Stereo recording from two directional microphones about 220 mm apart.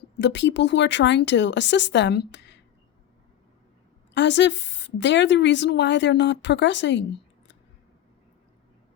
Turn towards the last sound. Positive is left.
turn(degrees=50)  # may be behind; listen again after turning